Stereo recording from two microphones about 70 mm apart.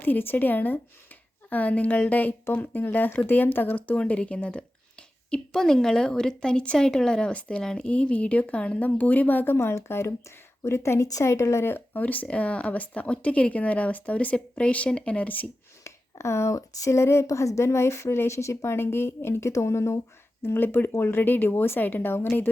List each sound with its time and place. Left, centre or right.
0.0 s a woman's voice: left
9.6 s speech: left
15.8 s speech: left